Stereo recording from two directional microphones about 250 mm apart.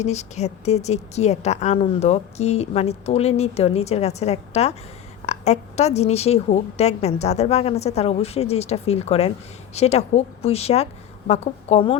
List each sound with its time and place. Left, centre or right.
0.0 s a woman's voice: left